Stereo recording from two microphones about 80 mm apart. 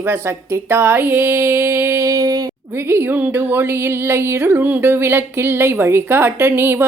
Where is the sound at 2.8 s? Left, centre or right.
Right.